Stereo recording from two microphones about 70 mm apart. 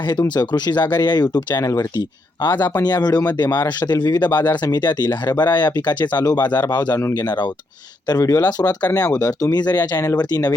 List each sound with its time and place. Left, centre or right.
0.1 s speech: left
1.6 s speech: left
2.4 s speech: left
8.2 s speech: left